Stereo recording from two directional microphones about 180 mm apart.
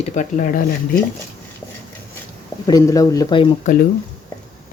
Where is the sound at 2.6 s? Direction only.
20° left (ahead or behind).